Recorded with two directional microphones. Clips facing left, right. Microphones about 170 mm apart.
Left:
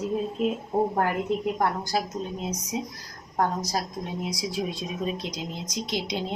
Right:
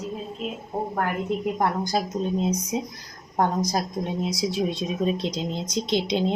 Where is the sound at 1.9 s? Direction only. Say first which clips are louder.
Right 4 dB; 20° right (ahead or behind).